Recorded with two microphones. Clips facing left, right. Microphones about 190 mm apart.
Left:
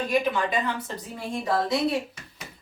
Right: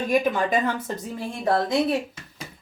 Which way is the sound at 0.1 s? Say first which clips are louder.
Right 4 dB; 45° right (ahead or behind).